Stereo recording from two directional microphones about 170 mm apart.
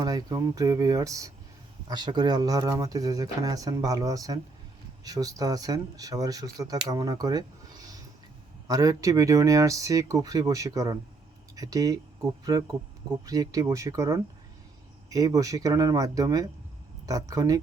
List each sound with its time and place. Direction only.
0.0 s speech: 20° right (ahead or behind)